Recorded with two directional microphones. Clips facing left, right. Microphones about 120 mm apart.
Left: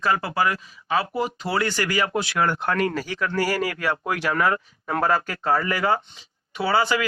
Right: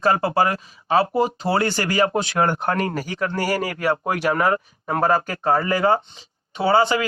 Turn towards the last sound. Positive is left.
turn(degrees=-25)  # may be behind; listen again after turning